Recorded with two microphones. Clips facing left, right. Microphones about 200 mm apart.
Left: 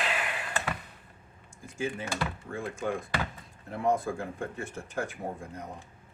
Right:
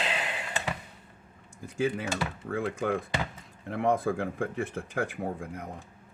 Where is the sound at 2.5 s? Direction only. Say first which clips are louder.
Right 6 dB; 90° right.